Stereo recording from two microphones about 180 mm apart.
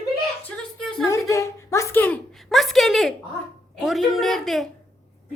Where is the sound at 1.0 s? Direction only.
15° left (ahead or behind).